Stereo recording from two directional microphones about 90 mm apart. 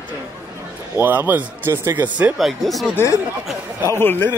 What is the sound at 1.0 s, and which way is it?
Speech, 20° right (ahead or behind).